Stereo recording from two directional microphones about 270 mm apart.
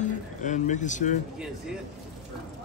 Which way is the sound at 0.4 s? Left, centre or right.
Left.